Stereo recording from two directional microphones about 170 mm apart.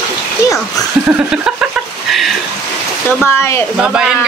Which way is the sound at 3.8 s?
5° right (ahead or behind).